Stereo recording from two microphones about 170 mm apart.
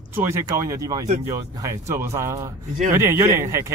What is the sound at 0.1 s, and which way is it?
Speech, 15° right (ahead or behind).